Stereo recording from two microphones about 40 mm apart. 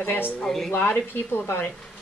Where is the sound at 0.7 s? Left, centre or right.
Left.